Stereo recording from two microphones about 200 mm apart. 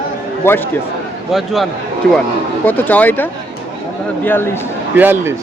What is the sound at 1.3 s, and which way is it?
Speech, centre (ahead or behind).